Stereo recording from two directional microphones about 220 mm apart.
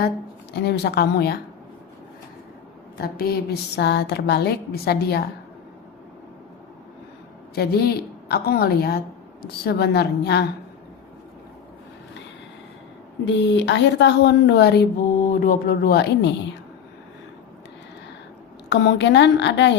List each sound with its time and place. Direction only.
0.5 s speech: 50° left (ahead or behind)
3.0 s speech: 45° left (ahead or behind)
7.5 s speech: 45° left (ahead or behind)
13.2 s speech: 55° left (ahead or behind)
18.7 s speech: 50° left (ahead or behind)